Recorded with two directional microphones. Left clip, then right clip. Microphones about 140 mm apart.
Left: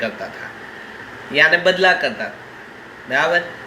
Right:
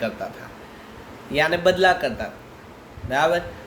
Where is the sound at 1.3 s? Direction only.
35° right (ahead or behind).